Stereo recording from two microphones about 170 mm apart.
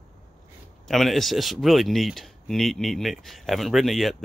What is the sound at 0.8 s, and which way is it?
Speech, centre (ahead or behind).